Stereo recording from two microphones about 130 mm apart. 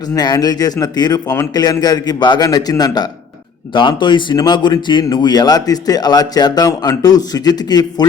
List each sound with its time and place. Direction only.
0.1 s speech: 30° left (ahead or behind)